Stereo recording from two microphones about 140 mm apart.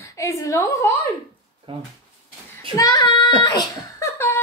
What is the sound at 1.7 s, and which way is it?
Speech, 40° right (ahead or behind).